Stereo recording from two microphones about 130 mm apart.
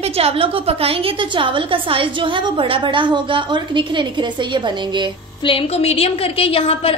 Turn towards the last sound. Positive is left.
turn(degrees=50)  # may be behind; listen again after turning